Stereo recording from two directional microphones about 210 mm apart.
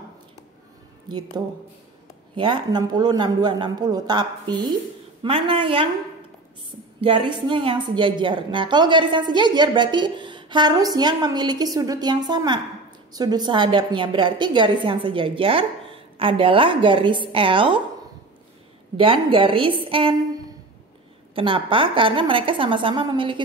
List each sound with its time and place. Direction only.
2.3 s a woman's voice: 20° right (ahead or behind)
7.0 s a woman's voice: 25° right (ahead or behind)
18.9 s a woman's voice: 25° right (ahead or behind)
21.4 s a woman's voice: 25° right (ahead or behind)